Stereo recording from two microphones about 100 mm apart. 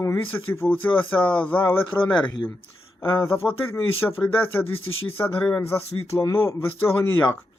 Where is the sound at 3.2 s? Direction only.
25° left (ahead or behind).